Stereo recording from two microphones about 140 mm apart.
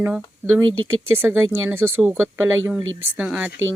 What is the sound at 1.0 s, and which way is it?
Speech, 15° right (ahead or behind).